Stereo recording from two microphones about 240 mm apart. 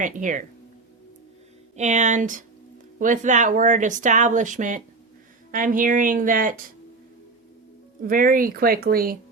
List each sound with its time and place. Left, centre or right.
0.0 s speech: right
1.7 s speech: right
8.0 s speech: right